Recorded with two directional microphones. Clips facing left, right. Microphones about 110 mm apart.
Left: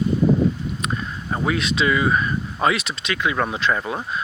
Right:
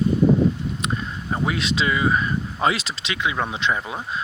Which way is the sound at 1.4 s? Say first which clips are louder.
Left 3 dB; 30° right (ahead or behind).